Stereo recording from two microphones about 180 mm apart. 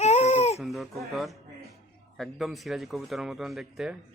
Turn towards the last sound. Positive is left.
turn(degrees=0)  # may be behind; listen again after turning